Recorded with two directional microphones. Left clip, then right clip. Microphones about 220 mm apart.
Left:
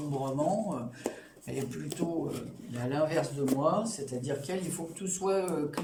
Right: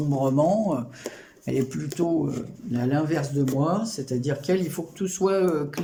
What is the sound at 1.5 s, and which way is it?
Speech, 35° right (ahead or behind).